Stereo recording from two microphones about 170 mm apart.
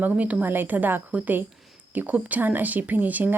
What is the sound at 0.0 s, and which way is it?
Speech, 10° right (ahead or behind).